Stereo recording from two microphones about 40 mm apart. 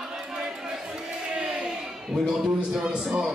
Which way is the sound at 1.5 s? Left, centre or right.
Right.